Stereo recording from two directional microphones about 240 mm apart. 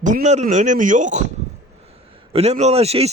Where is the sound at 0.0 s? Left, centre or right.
Right.